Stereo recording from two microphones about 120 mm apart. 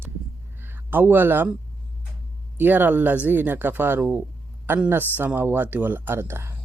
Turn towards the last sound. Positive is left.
turn(degrees=-20)  # may be behind; listen again after turning